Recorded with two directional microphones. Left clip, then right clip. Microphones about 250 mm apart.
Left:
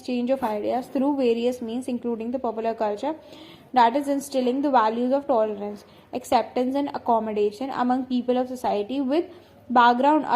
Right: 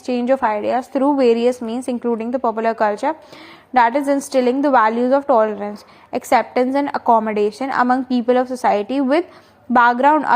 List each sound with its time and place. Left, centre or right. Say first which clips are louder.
0.0 s a woman's voice: right 8 dB; right